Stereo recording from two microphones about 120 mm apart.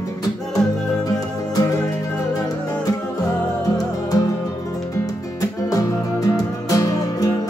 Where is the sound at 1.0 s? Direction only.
30° left (ahead or behind).